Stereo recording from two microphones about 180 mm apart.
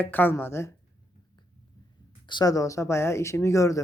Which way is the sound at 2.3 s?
25° left (ahead or behind).